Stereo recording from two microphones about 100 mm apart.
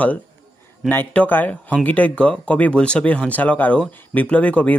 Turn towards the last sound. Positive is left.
turn(degrees=15)  # may be behind; listen again after turning